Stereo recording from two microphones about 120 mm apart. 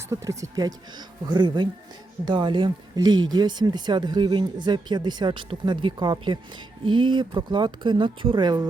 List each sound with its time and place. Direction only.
0.1 s speech: 25° right (ahead or behind)